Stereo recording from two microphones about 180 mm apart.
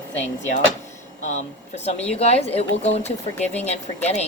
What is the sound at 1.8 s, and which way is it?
Speech, 35° left (ahead or behind).